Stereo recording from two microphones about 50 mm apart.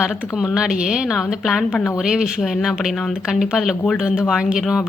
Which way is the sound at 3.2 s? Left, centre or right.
Centre.